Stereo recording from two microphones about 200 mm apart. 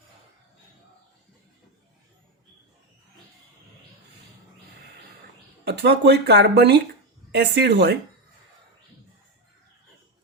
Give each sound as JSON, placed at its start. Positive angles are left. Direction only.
{"t": 5.6, "sound": "speech", "side_deg": -55}